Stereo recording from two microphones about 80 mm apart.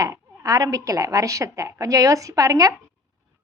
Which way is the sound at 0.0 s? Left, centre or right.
Right.